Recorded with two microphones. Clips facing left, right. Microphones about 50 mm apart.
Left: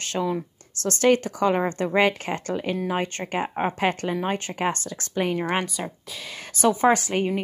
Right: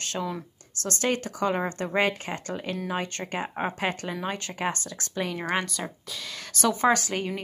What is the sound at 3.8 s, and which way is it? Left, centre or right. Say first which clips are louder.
A woman's voice: left 5 dB; left.